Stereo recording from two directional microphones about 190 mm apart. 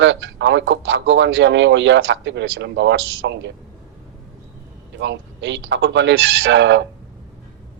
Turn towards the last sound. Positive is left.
turn(degrees=-75)  # may be behind; listen again after turning